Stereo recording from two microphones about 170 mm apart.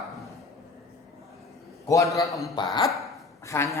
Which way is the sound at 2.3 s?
Centre (ahead or behind).